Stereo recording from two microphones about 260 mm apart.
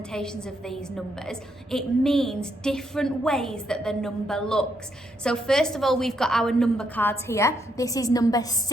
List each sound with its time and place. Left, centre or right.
0.1 s a woman's voice: centre